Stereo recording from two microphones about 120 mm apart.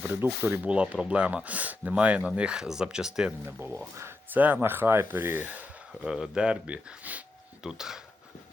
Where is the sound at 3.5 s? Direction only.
20° right (ahead or behind).